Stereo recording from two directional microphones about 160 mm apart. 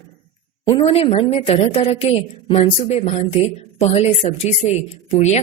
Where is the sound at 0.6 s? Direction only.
30° left (ahead or behind).